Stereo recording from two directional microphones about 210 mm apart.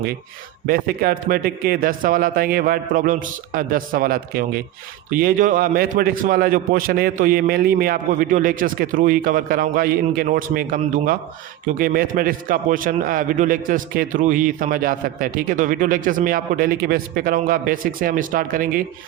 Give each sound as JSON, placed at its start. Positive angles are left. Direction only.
{"t": 0.7, "sound": "a man's voice", "side_deg": -45}